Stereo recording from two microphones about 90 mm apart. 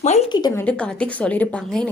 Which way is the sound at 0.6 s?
15° left (ahead or behind).